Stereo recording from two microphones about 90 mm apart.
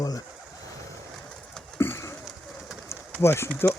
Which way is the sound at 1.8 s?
30° left (ahead or behind).